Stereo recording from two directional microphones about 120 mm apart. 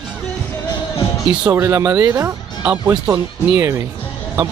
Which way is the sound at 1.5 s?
25° right (ahead or behind).